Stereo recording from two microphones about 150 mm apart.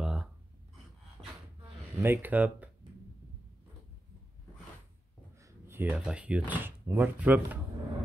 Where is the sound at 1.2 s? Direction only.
5° left (ahead or behind).